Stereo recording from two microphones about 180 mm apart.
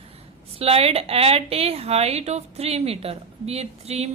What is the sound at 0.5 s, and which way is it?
A woman's voice, 35° right (ahead or behind).